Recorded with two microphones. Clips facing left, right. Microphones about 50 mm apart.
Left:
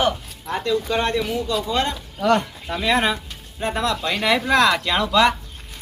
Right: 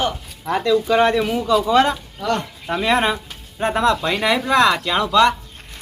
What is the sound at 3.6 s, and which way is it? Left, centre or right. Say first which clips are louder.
Speech: right 4 dB; right.